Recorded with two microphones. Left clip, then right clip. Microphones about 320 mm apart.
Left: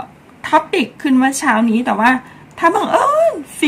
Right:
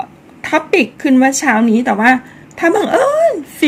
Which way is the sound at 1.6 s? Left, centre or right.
Centre.